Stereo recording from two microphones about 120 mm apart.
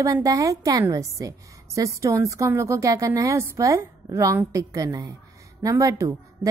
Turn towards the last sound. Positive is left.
turn(degrees=-25)  # may be behind; listen again after turning